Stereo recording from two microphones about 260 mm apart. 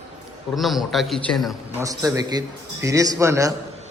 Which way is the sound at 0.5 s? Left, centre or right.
Centre.